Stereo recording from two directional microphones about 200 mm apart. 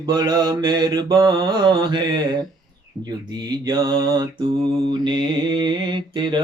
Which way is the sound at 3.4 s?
20° right (ahead or behind).